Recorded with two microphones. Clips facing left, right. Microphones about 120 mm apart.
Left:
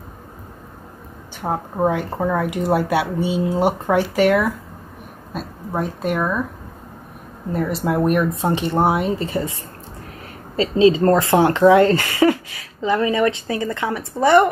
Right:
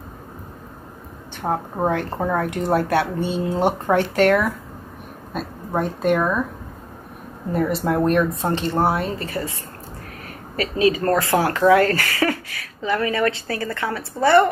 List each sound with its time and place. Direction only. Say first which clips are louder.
1.4 s speech: left 2 dB; 5° left (ahead or behind)
5.8 s speech: right 2 dB; centre (ahead or behind)
7.5 s speech: even; centre (ahead or behind); by 14.5 s 15° left (ahead or behind)